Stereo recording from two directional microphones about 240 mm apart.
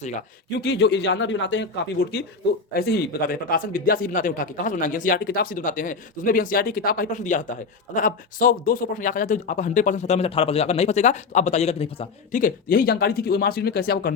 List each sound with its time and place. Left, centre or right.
0.6 s speech: left
2.7 s speech: left